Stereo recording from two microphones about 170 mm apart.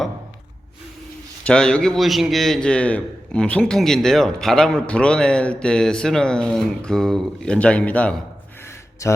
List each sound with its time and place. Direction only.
1.5 s a man's voice: 5° left (ahead or behind)
9.0 s speech: 20° left (ahead or behind)